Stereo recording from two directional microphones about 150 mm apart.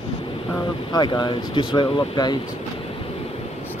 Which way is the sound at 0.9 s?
30° left (ahead or behind).